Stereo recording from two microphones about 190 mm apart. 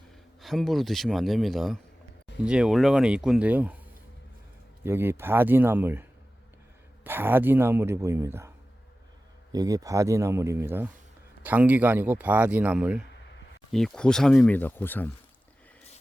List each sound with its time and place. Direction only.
0.4 s a man's voice: centre (ahead or behind)
4.8 s a man's voice: 10° right (ahead or behind); by 15.1 s 10° left (ahead or behind)